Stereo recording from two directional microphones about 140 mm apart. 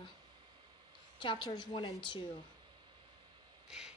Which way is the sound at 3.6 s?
5° right (ahead or behind).